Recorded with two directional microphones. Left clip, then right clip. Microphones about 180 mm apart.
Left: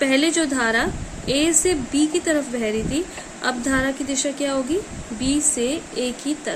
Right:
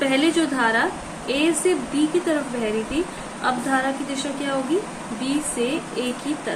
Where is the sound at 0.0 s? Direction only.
55° left (ahead or behind).